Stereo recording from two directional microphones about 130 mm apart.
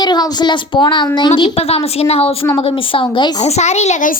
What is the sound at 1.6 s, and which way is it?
Speech, 50° left (ahead or behind).